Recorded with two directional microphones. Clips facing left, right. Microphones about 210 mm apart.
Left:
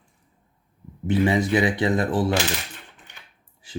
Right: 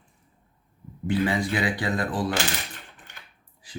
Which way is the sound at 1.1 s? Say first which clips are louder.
Left 4 dB; 20° left (ahead or behind).